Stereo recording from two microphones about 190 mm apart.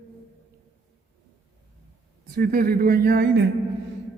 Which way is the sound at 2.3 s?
50° right (ahead or behind).